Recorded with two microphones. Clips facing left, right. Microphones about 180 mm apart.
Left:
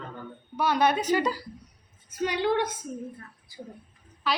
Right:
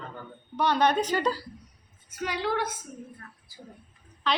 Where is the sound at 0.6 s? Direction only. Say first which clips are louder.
Even; 10° left (ahead or behind).